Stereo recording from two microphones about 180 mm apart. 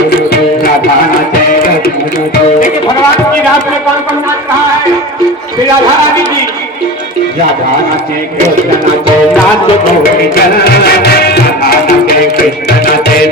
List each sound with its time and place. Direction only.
10.6 s music: 60° left (ahead or behind)